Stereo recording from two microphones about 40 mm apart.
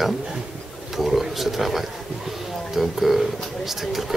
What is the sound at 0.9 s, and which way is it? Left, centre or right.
A man's voice, centre.